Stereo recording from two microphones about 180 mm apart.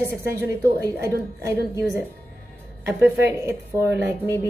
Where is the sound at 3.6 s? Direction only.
15° right (ahead or behind).